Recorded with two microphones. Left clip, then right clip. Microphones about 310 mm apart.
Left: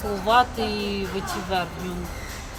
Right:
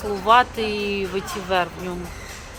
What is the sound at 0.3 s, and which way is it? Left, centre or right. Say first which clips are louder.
Speech: right 3 dB; centre.